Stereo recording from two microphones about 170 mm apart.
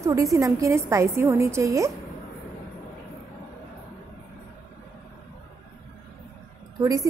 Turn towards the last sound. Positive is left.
turn(degrees=-20)  # may be behind; listen again after turning